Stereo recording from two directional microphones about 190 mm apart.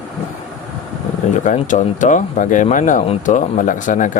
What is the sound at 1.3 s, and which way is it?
Speech, 40° left (ahead or behind).